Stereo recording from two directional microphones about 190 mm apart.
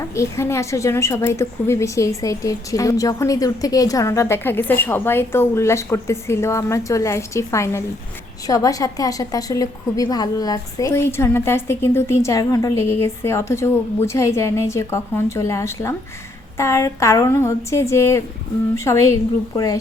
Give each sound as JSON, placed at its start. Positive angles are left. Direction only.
{"t": 0.1, "sound": "a woman's voice", "side_deg": 15}